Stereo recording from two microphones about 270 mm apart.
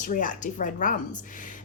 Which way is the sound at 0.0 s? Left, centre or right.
Left.